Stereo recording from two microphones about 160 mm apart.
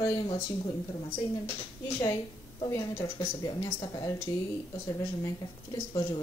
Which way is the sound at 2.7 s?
20° left (ahead or behind).